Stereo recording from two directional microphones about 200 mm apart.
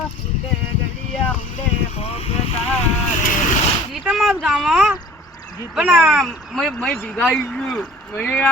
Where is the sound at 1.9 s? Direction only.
30° left (ahead or behind).